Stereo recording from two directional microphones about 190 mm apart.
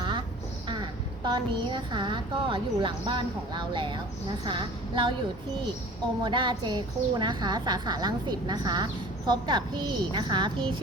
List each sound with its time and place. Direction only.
1.2 s a woman's voice: 25° right (ahead or behind)
6.2 s a woman's voice: 25° right (ahead or behind)